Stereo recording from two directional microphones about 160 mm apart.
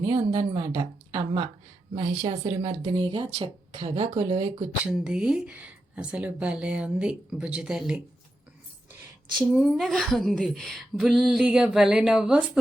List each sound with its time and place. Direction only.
0.0 s a woman's voice: 30° right (ahead or behind)
4.9 s speech: 5° right (ahead or behind)
9.5 s speech: centre (ahead or behind)